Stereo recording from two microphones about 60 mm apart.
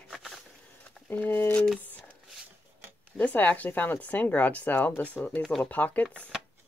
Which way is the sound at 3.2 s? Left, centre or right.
Left.